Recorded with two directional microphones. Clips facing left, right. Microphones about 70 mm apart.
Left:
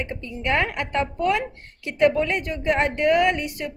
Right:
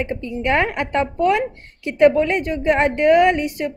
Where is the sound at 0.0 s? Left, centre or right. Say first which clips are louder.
Right 6 dB; right.